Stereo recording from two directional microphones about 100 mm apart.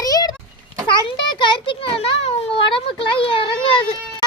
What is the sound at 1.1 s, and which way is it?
A child's voice, 55° left (ahead or behind).